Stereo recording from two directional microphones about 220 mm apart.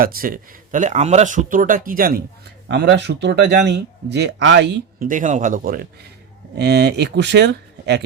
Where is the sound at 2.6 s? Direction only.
50° right (ahead or behind).